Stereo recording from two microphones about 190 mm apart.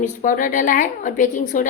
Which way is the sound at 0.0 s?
45° left (ahead or behind).